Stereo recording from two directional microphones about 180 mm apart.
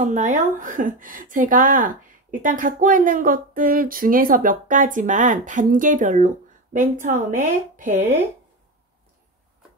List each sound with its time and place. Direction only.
0.0 s speech: 40° right (ahead or behind)